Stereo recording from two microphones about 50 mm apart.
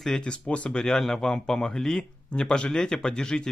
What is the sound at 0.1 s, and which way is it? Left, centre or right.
Speech, centre.